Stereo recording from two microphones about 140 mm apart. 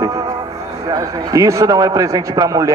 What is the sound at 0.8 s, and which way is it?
A man's voice, 25° right (ahead or behind).